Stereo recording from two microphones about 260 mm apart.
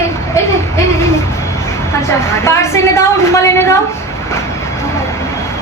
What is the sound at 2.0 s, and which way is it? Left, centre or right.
A woman's voice, centre.